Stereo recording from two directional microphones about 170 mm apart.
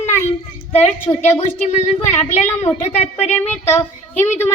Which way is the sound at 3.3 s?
10° left (ahead or behind).